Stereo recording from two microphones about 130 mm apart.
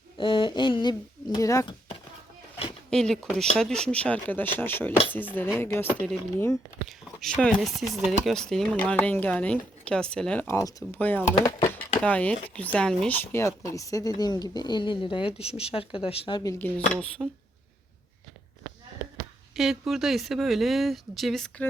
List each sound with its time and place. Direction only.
0.2 s speech: 40° left (ahead or behind)
2.9 s speech: 5° left (ahead or behind)
6.8 s speech: centre (ahead or behind)
10.4 s speech: 25° left (ahead or behind)
10.9 s speech: 15° left (ahead or behind); by 16.4 s 45° left (ahead or behind)
16.4 s speech: 25° left (ahead or behind)
16.9 s speech: 5° left (ahead or behind)
19.5 s speech: centre (ahead or behind)